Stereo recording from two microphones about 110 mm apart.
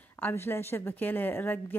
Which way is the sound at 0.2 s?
20° left (ahead or behind).